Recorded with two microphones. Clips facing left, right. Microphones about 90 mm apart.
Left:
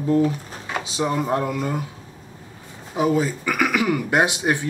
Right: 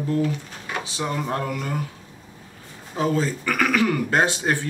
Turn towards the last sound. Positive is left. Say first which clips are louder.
# left 1 dB
turn(degrees=15)  # may be behind; listen again after turning